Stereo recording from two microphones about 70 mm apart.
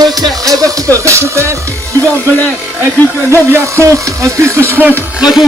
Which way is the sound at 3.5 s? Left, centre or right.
Right.